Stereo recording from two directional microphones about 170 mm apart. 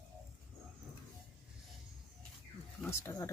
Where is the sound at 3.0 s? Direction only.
15° left (ahead or behind).